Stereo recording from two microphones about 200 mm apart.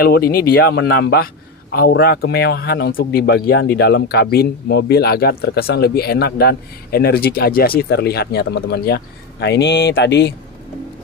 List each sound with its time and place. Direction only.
0.0 s a man's voice: 50° left (ahead or behind)